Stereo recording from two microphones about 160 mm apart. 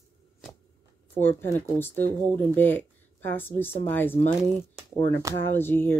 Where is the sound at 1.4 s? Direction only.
15° left (ahead or behind).